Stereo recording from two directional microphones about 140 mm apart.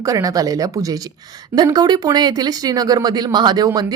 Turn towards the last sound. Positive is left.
turn(degrees=-30)  # may be behind; listen again after turning